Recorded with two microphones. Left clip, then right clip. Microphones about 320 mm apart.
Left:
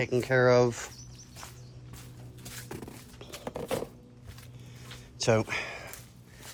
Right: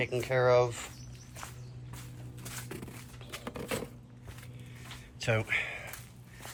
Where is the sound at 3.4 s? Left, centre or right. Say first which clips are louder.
Left 4 dB; left.